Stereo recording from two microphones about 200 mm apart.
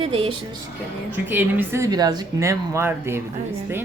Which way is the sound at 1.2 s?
10° right (ahead or behind).